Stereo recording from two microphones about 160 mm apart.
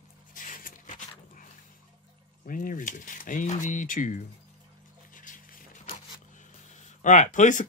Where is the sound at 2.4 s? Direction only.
55° left (ahead or behind).